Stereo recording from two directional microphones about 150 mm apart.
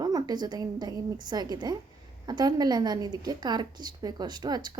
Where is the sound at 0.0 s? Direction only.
25° right (ahead or behind).